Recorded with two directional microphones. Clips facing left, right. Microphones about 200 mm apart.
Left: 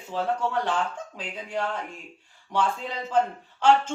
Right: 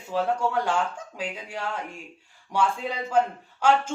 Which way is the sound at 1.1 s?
10° right (ahead or behind).